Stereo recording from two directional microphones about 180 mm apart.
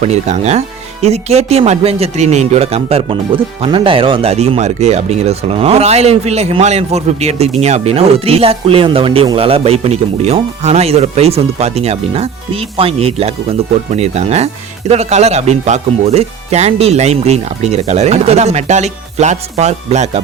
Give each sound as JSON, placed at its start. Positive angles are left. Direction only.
{"t": 0.0, "sound": "speech", "side_deg": -40}